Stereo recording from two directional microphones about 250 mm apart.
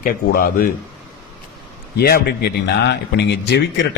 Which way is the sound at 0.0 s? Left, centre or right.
Left.